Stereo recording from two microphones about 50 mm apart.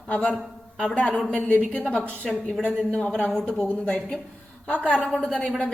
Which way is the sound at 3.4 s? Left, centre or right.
Left.